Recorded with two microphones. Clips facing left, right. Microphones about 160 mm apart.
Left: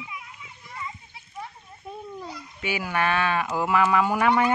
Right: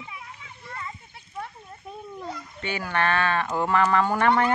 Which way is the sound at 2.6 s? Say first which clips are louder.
Even; 10° left (ahead or behind).